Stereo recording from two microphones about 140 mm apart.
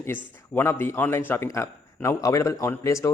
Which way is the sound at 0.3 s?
15° left (ahead or behind).